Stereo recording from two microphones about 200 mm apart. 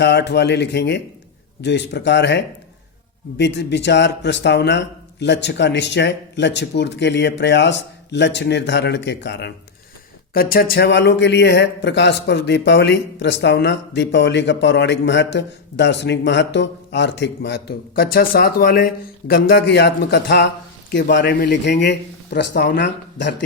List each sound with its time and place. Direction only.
0.0 s speech: 60° left (ahead or behind)
10.3 s speech: 45° left (ahead or behind)